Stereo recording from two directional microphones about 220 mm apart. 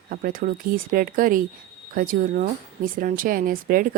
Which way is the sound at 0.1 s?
40° right (ahead or behind).